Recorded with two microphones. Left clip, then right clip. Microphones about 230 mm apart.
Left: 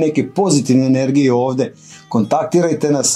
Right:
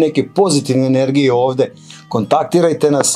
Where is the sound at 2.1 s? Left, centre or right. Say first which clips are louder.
Right 2 dB; right.